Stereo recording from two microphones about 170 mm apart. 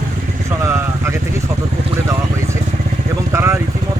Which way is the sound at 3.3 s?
15° right (ahead or behind).